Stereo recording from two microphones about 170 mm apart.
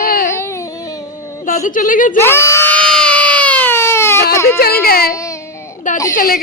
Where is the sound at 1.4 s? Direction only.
50° left (ahead or behind).